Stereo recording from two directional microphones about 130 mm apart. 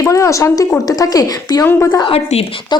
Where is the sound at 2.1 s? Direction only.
50° left (ahead or behind).